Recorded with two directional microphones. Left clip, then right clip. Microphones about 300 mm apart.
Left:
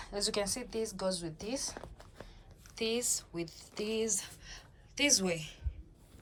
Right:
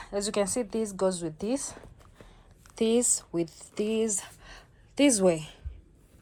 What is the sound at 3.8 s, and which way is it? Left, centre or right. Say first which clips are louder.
Speech: right 7 dB; left.